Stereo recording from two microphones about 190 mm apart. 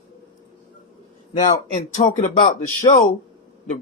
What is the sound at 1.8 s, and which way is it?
Speech, 40° left (ahead or behind).